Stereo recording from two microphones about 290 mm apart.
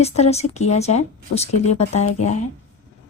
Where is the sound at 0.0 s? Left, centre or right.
Left.